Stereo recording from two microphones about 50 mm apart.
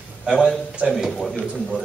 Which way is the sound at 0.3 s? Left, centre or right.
Centre.